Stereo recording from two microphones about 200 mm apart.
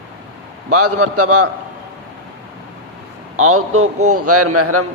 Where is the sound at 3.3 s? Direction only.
90° right.